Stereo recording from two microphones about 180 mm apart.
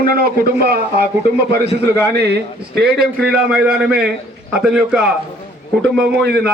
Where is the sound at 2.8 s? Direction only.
65° right (ahead or behind).